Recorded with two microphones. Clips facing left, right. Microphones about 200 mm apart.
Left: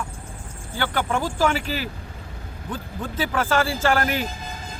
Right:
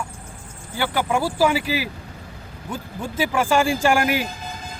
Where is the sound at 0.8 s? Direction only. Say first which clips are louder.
Right 2 dB; 10° right (ahead or behind).